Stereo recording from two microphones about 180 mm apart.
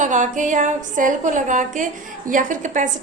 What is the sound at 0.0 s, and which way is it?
A woman's voice, 45° right (ahead or behind).